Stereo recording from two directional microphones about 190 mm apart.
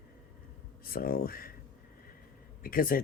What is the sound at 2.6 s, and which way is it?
Speech, 50° left (ahead or behind).